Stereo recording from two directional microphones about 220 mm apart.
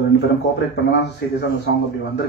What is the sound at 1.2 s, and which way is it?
Speech, 50° left (ahead or behind).